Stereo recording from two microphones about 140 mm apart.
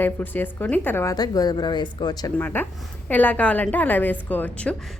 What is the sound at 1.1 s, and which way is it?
A woman's voice, 25° left (ahead or behind).